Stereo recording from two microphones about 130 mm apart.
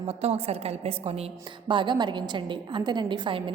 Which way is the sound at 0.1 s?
50° right (ahead or behind).